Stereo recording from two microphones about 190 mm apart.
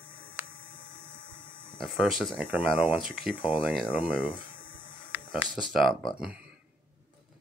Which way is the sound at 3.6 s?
Centre (ahead or behind).